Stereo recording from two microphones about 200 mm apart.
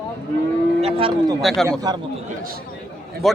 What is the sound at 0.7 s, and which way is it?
Speech, 30° right (ahead or behind).